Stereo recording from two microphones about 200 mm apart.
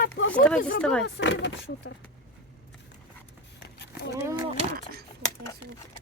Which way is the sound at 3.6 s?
55° left (ahead or behind).